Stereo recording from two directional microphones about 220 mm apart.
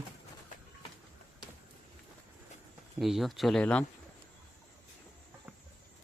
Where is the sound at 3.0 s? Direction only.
Centre (ahead or behind).